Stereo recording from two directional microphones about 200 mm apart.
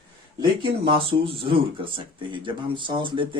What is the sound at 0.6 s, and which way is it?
Speech, 25° right (ahead or behind).